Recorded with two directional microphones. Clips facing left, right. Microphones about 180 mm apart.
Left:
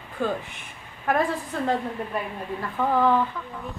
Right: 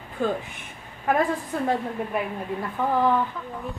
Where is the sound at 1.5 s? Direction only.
10° right (ahead or behind).